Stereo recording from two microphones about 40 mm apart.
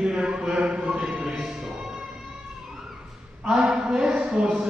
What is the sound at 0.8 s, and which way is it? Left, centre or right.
Speech, centre.